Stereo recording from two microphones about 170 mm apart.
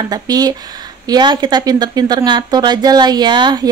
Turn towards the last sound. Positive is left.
turn(degrees=-25)  # may be behind; listen again after turning